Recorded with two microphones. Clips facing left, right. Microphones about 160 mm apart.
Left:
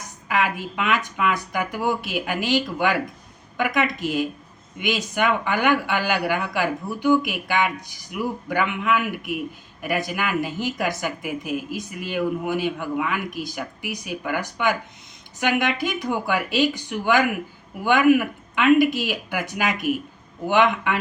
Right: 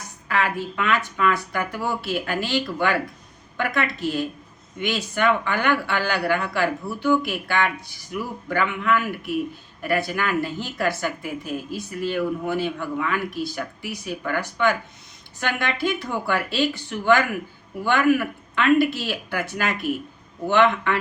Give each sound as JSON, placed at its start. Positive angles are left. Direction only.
{"t": 0.3, "sound": "speech", "side_deg": 15}